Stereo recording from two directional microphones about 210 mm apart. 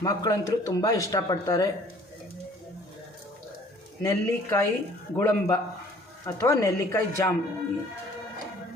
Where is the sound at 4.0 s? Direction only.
15° left (ahead or behind).